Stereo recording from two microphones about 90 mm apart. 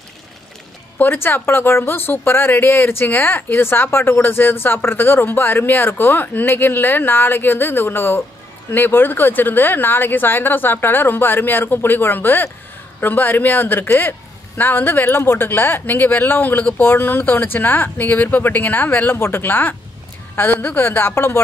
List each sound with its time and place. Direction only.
0.9 s speech: 25° left (ahead or behind)